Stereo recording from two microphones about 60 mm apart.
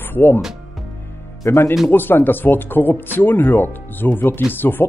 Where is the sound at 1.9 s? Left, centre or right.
Left.